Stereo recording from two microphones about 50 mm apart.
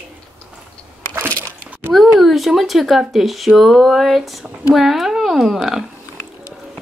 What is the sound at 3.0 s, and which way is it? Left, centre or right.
Speech, centre.